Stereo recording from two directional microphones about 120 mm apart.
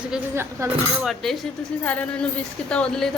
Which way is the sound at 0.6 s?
25° right (ahead or behind).